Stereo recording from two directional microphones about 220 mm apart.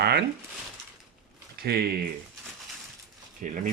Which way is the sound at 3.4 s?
40° right (ahead or behind).